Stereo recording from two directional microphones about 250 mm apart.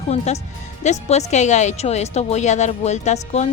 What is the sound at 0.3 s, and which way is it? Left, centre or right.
A woman's voice, left.